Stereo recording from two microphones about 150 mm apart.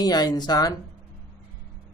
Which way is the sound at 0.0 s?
25° left (ahead or behind).